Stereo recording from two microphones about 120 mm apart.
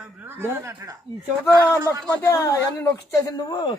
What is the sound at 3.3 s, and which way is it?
Speech, 35° left (ahead or behind).